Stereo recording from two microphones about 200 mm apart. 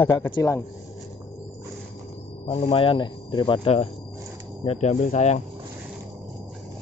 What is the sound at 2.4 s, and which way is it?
Speech, 30° left (ahead or behind).